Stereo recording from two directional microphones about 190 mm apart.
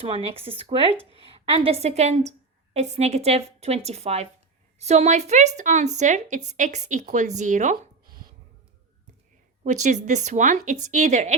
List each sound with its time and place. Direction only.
0.0 s speech: 30° right (ahead or behind)
9.6 s speech: 40° right (ahead or behind)